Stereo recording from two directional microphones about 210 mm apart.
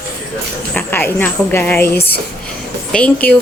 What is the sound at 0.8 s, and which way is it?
Speech, 10° left (ahead or behind).